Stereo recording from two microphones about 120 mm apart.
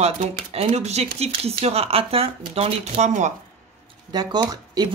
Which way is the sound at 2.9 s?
80° right.